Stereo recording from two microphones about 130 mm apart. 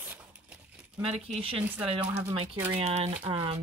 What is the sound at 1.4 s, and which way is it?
Speech, 45° right (ahead or behind).